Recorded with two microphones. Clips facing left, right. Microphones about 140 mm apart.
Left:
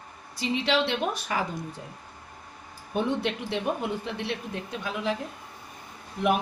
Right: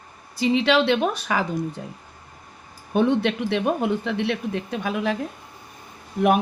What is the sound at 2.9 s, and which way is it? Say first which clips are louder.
Speech: right 7 dB; 70° right (ahead or behind).